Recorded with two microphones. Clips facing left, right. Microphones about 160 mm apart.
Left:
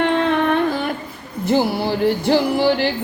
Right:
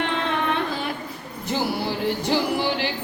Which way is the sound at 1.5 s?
60° left (ahead or behind).